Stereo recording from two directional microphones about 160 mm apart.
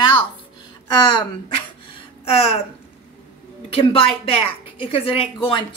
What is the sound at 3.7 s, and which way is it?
Speech, 35° left (ahead or behind).